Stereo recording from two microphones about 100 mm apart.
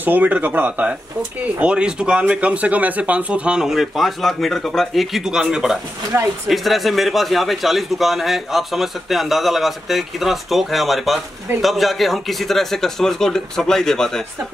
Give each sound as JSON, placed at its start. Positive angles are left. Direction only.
{"t": 0.0, "sound": "speech", "side_deg": -15}
{"t": 6.1, "sound": "speech", "side_deg": -30}
{"t": 6.5, "sound": "a man's voice", "side_deg": 0}